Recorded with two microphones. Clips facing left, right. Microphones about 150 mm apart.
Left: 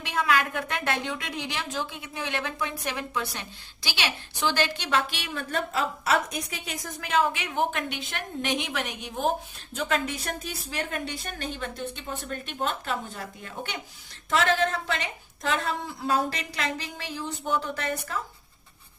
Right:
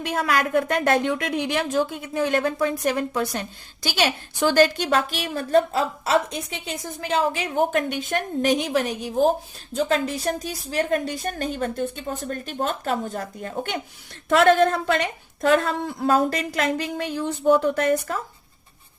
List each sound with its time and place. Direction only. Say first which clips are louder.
0.0 s a woman's voice: right 3 dB; 45° right (ahead or behind)
14.3 s a woman's voice: right 8 dB; 60° right (ahead or behind)